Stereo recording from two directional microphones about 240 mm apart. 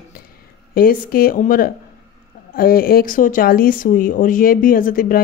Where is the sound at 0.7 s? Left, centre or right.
Left.